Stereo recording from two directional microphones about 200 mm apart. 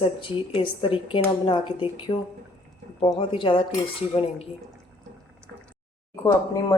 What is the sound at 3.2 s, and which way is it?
Speech, 25° left (ahead or behind).